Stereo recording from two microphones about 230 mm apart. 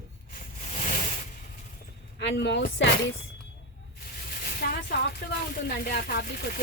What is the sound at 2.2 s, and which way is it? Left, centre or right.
Speech, left.